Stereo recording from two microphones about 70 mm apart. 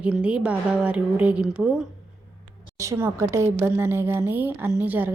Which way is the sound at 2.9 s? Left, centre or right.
Right.